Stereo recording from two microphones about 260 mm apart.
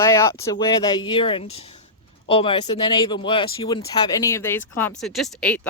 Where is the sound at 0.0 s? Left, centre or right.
Centre.